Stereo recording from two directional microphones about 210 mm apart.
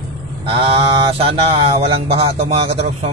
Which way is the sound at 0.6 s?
25° right (ahead or behind).